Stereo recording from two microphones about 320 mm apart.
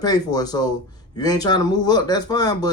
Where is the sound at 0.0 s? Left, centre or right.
Centre.